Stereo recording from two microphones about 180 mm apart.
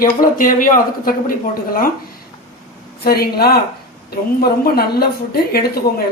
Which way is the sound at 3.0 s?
60° left (ahead or behind).